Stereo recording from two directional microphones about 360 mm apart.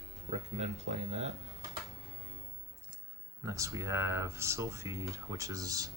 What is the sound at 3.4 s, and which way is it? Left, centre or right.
Speech, centre.